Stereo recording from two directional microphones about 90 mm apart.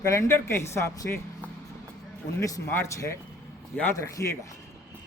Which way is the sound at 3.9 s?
35° left (ahead or behind).